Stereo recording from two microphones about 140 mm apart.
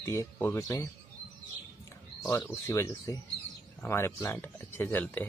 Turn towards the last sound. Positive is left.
turn(degrees=10)  # may be behind; listen again after turning